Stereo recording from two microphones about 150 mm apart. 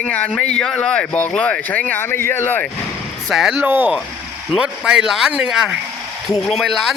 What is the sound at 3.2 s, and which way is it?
Speech, centre (ahead or behind).